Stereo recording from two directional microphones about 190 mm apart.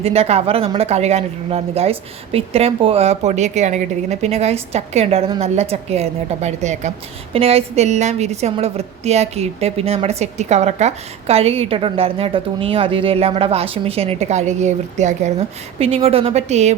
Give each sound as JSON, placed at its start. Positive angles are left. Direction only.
{"t": 0.0, "sound": "a woman's voice", "side_deg": -30}